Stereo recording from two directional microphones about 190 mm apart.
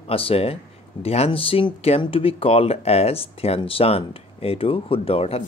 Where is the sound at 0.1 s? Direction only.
30° left (ahead or behind).